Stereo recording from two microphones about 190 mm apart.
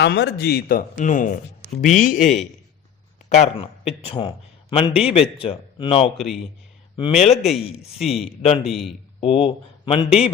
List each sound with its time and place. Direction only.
0.0 s speech: 65° left (ahead or behind); by 6.1 s 30° left (ahead or behind)
6.1 s speech: centre (ahead or behind)
6.9 s speech: 30° left (ahead or behind)
7.9 s speech: centre (ahead or behind)
8.4 s speech: 30° left (ahead or behind)
8.6 s speech: centre (ahead or behind)
9.2 s speech: 30° left (ahead or behind)